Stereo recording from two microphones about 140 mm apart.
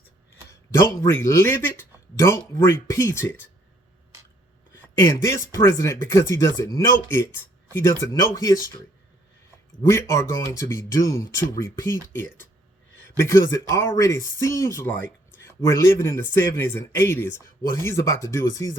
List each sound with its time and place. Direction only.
0.7 s speech: 20° left (ahead or behind)
4.9 s speech: 20° left (ahead or behind)
9.9 s speech: 20° left (ahead or behind)